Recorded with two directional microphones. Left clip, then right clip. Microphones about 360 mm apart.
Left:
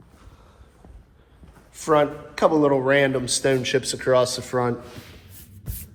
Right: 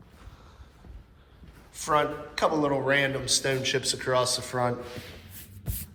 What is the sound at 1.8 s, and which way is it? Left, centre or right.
Speech, centre.